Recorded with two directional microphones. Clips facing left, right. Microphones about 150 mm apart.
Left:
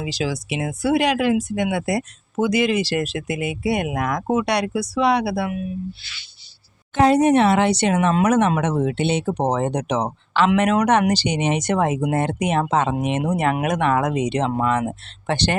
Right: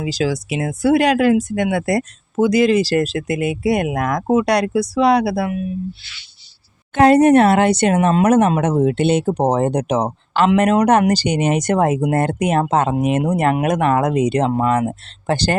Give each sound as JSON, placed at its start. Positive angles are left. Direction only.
{"t": 0.0, "sound": "speech", "side_deg": -40}
{"t": 7.0, "sound": "speech", "side_deg": -60}